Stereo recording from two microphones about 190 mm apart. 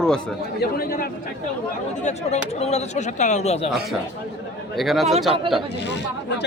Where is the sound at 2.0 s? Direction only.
35° left (ahead or behind).